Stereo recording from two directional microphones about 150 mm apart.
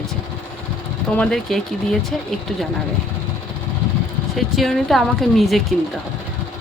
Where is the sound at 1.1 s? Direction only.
5° left (ahead or behind).